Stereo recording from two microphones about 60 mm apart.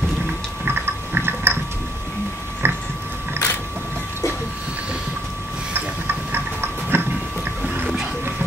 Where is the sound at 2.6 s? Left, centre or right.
Right.